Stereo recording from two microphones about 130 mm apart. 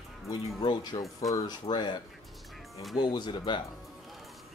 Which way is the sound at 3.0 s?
35° left (ahead or behind).